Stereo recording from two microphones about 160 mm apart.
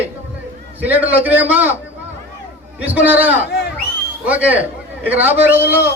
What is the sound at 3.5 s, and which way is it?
Crowd, 85° left.